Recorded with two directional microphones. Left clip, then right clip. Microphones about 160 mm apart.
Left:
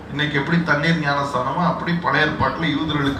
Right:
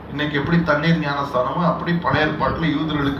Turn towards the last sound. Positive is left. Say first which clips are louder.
# even
turn(degrees=-20)  # may be behind; listen again after turning